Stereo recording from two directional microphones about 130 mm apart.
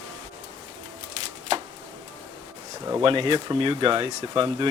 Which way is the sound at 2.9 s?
45° right (ahead or behind).